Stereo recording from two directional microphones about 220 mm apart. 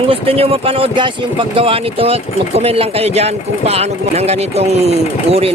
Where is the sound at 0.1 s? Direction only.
25° right (ahead or behind).